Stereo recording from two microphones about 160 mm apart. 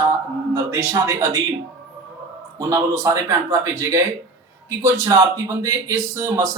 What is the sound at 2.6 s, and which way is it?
Speech, 20° right (ahead or behind).